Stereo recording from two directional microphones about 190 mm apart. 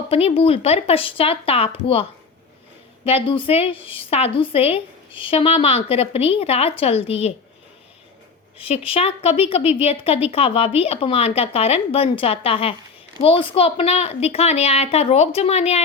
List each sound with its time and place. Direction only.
0.1 s a woman's voice: 30° left (ahead or behind)
8.5 s a woman's voice: 30° left (ahead or behind)